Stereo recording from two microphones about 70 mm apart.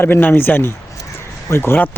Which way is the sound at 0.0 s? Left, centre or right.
Left.